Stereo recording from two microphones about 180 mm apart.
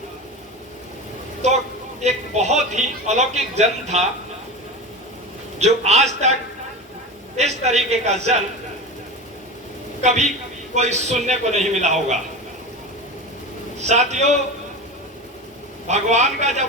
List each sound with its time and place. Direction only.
2.0 s a man's voice: 40° right (ahead or behind)
5.5 s a man's voice: 40° right (ahead or behind)
7.3 s a man's voice: 40° right (ahead or behind)
10.0 s a man's voice: 40° right (ahead or behind)
13.7 s a man's voice: 40° right (ahead or behind)
15.9 s a man's voice: 40° right (ahead or behind)